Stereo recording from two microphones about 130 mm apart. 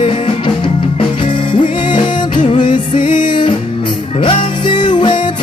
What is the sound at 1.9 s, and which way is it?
Music, 35° left (ahead or behind).